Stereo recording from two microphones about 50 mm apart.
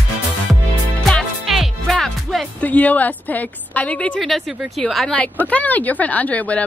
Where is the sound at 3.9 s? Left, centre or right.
Left.